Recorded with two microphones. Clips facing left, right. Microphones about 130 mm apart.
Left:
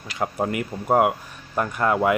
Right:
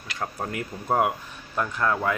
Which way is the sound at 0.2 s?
20° left (ahead or behind).